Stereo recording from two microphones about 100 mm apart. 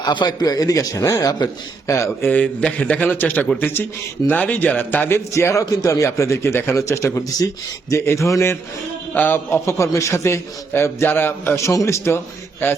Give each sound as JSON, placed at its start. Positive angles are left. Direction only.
{"t": 0.0, "sound": "a man's voice", "side_deg": 45}
{"t": 2.2, "sound": "a man's voice", "side_deg": 15}